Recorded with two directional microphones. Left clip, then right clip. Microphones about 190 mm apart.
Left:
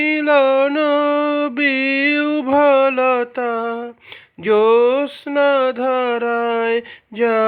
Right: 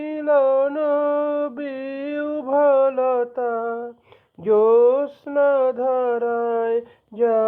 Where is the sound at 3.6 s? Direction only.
40° left (ahead or behind).